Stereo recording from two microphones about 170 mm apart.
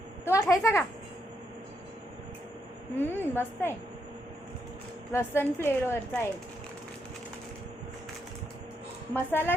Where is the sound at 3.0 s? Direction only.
10° left (ahead or behind).